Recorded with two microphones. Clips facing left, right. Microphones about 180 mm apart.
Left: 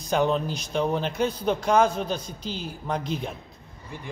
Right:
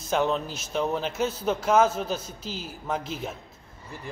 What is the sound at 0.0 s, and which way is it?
A man's voice, centre (ahead or behind).